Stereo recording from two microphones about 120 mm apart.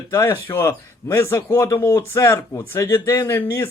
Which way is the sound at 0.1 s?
20° left (ahead or behind).